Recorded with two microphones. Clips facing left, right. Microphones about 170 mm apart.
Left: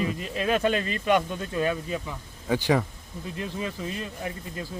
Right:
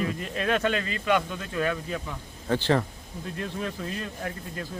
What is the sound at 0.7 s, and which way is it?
Speech, 30° left (ahead or behind).